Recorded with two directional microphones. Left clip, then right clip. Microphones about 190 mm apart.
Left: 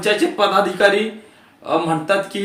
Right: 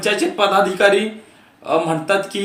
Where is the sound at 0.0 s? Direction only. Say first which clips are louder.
Even; 10° right (ahead or behind).